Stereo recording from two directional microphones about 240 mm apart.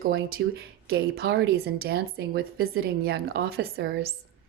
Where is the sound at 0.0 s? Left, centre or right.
Right.